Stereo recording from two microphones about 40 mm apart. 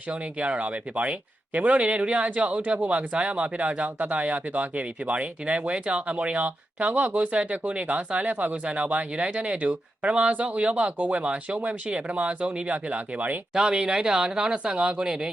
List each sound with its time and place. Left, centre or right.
0.1 s speech: right
13.5 s speech: centre